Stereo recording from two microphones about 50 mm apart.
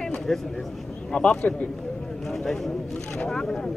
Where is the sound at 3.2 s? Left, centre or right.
Centre.